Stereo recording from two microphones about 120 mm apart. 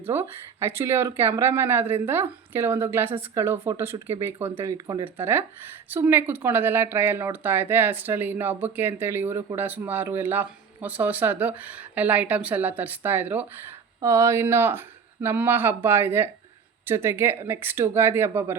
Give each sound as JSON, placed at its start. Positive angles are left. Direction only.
{"t": 0.0, "sound": "speech", "side_deg": -20}
{"t": 4.7, "sound": "speech", "side_deg": -30}
{"t": 5.1, "sound": "speech", "side_deg": -20}
{"t": 14.0, "sound": "speech", "side_deg": -25}